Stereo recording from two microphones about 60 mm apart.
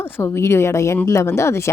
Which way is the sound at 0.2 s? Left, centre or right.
Left.